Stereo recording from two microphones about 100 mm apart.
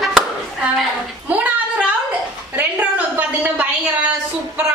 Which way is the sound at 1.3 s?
15° right (ahead or behind).